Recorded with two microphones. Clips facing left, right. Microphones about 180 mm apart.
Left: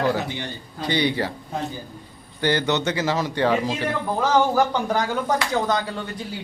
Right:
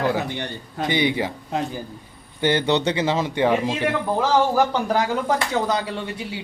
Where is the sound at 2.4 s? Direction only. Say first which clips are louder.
Right 2 dB; 25° right (ahead or behind).